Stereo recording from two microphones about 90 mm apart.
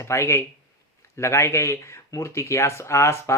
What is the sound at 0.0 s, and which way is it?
Speech, 30° left (ahead or behind).